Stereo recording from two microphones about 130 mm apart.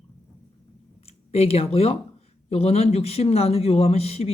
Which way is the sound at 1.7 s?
50° left (ahead or behind).